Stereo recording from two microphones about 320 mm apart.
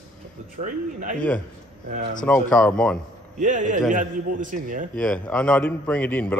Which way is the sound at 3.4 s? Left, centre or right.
Right.